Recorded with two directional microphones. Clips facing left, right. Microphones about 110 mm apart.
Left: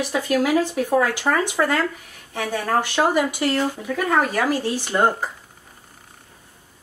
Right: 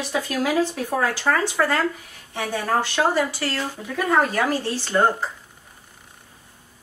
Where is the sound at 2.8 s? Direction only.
15° left (ahead or behind).